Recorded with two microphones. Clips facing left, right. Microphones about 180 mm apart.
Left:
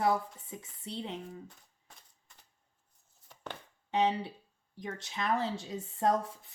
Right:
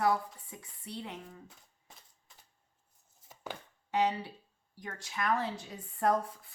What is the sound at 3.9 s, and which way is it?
Speech, 25° left (ahead or behind).